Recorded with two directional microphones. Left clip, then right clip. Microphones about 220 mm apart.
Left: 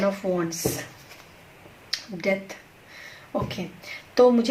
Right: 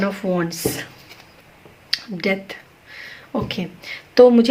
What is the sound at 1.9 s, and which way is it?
A woman's voice, 45° right (ahead or behind).